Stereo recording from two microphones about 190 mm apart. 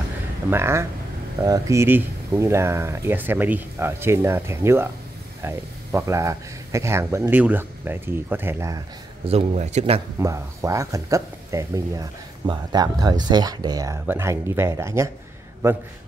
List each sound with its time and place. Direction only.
0.5 s speech: 15° right (ahead or behind)
9.2 s a man's voice: 35° right (ahead or behind)
10.1 s speech: 15° right (ahead or behind)